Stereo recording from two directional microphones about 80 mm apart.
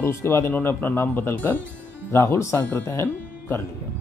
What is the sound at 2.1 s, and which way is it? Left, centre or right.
Speech, left.